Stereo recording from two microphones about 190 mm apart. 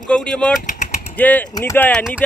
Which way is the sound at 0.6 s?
40° left (ahead or behind).